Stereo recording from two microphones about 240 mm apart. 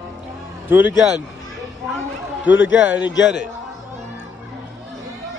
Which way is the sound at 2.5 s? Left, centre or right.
Left.